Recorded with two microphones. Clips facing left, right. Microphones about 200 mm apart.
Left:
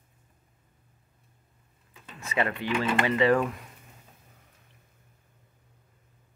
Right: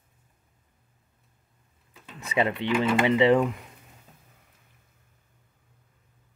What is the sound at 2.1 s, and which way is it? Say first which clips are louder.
Speech: right 3 dB; 20° right (ahead or behind).